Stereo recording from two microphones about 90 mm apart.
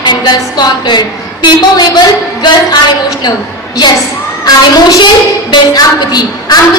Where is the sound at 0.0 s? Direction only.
55° left (ahead or behind).